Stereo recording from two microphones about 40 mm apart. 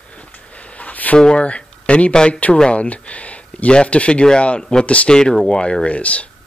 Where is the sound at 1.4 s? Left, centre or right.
Left.